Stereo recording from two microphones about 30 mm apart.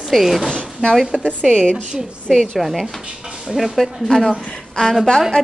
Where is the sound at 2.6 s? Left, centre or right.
Centre.